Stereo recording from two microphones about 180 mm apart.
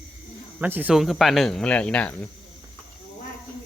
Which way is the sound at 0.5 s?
10° right (ahead or behind).